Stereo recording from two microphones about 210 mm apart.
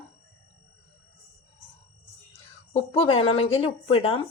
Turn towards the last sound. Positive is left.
turn(degrees=25)  # may be behind; listen again after turning